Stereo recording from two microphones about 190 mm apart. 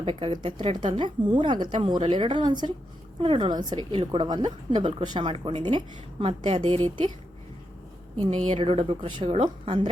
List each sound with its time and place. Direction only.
0.0 s a woman's voice: 30° right (ahead or behind)
8.4 s a woman's voice: 30° right (ahead or behind)